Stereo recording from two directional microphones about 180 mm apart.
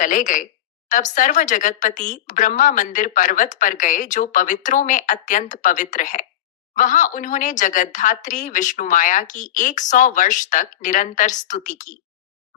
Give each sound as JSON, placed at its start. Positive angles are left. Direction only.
{"t": 0.0, "sound": "speech", "side_deg": 45}